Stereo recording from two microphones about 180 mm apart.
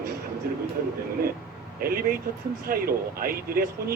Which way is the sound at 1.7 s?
55° right (ahead or behind).